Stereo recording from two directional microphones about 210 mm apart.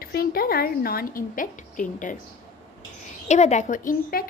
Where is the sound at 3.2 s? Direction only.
35° left (ahead or behind).